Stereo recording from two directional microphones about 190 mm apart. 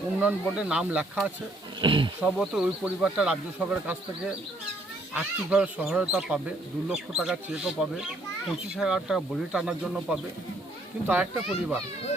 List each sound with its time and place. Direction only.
0.2 s speech: 5° right (ahead or behind)
1.8 s speech: 25° right (ahead or behind)
2.2 s speech: 5° right (ahead or behind)
8.7 s a child's voice: 5° right (ahead or behind)